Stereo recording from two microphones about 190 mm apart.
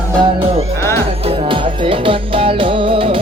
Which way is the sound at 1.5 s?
25° right (ahead or behind).